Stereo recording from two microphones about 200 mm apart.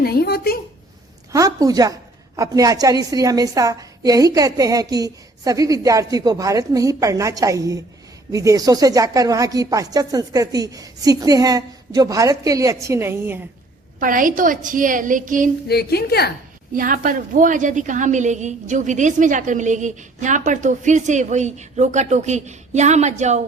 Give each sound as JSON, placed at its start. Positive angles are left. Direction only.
{"t": 0.0, "sound": "a woman's voice", "side_deg": 50}
{"t": 1.3, "sound": "a woman's voice", "side_deg": -15}
{"t": 14.0, "sound": "a woman's voice", "side_deg": -40}
{"t": 15.6, "sound": "a woman's voice", "side_deg": 50}
{"t": 16.7, "sound": "a woman's voice", "side_deg": -45}